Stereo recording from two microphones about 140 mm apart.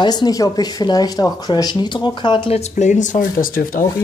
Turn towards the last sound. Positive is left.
turn(degrees=85)